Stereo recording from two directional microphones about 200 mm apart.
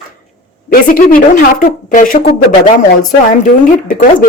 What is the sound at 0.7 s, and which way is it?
Speech, 45° left (ahead or behind).